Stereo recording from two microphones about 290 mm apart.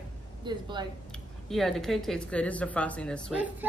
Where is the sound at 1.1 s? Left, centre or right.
Centre.